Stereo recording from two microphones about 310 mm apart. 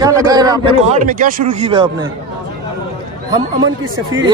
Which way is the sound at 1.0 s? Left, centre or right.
Right.